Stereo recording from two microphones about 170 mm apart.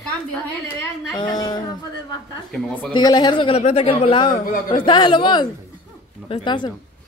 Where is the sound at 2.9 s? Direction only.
25° left (ahead or behind).